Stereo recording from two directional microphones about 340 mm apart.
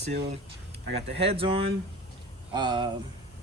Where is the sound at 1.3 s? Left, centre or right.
Centre.